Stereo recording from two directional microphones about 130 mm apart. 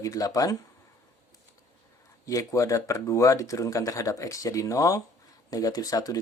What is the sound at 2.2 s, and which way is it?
Speech, 25° left (ahead or behind).